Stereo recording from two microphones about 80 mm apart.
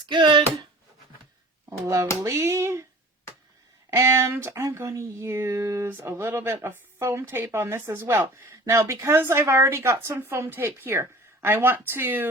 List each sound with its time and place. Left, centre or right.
0.1 s a sound: right
2.2 s speech: right
3.8 s speech: right